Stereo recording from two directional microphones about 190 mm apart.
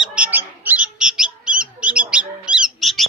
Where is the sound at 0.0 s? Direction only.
5° right (ahead or behind).